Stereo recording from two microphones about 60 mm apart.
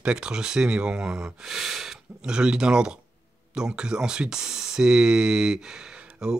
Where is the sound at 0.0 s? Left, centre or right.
Centre.